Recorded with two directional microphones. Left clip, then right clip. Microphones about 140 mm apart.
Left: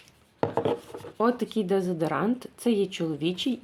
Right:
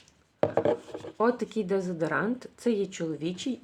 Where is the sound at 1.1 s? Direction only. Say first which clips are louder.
Left 1 dB; 10° left (ahead or behind).